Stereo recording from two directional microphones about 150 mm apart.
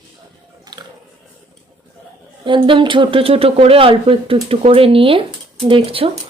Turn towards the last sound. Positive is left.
turn(degrees=-35)  # may be behind; listen again after turning